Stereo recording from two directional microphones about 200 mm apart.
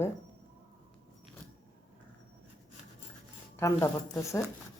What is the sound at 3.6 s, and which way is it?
Speech, 15° left (ahead or behind).